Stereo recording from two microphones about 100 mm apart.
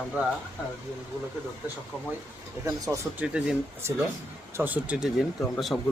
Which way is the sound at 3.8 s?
25° right (ahead or behind).